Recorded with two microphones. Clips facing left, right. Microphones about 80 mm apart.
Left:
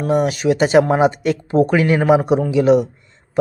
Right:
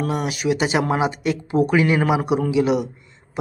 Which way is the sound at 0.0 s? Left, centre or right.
Left.